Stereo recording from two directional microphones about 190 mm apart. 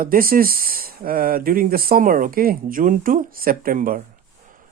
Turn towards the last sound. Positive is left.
turn(degrees=-45)  # may be behind; listen again after turning